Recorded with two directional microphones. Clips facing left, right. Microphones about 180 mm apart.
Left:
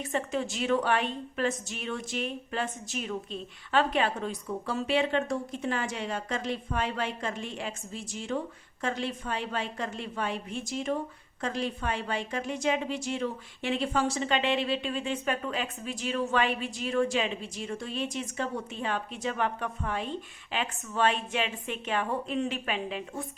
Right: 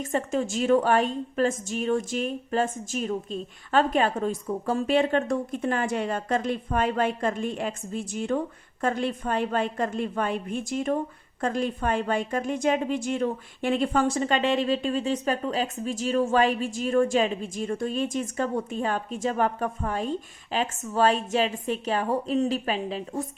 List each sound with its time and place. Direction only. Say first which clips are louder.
0.0 s a woman's voice: right 4 dB; 45° right (ahead or behind)